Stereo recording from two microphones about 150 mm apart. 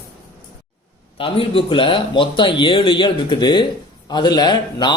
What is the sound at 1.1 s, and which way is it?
Speech, 40° left (ahead or behind).